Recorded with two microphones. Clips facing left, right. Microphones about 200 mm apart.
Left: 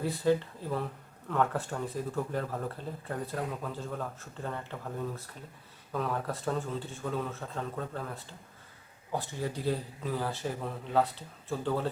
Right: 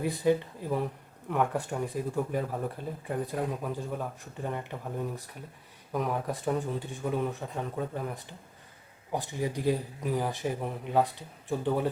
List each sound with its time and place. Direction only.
0.0 s speech: 15° right (ahead or behind)